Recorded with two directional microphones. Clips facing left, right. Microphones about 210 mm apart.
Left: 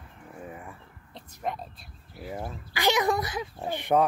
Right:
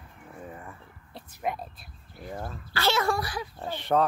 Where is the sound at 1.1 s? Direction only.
5° right (ahead or behind).